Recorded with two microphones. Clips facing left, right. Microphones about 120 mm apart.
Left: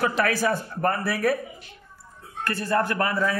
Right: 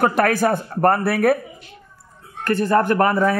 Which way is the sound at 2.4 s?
55° right (ahead or behind).